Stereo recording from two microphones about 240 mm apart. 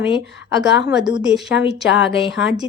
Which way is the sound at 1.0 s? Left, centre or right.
Centre.